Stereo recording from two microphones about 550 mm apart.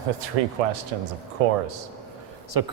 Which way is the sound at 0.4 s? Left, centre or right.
Right.